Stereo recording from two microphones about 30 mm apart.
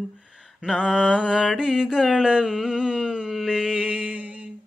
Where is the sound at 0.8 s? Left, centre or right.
Right.